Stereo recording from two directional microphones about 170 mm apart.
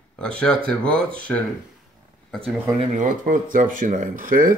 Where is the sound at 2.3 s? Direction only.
Centre (ahead or behind).